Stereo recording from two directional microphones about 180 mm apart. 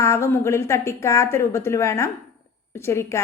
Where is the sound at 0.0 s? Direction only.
15° left (ahead or behind).